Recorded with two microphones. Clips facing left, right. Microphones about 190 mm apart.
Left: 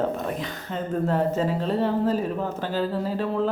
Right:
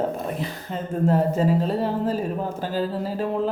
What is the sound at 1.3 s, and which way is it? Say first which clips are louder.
Speech: right 2 dB; 10° right (ahead or behind).